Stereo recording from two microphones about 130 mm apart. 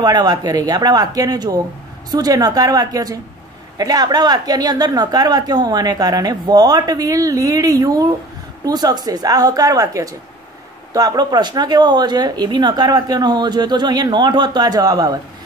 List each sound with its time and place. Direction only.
0.0 s a woman's voice: 30° right (ahead or behind)